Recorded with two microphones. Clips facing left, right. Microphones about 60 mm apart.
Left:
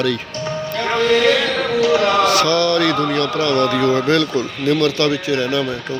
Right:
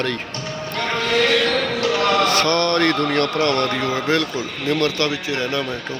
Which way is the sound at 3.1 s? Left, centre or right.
Right.